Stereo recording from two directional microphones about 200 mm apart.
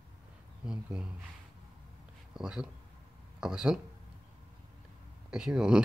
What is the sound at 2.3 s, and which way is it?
Speech, 5° right (ahead or behind).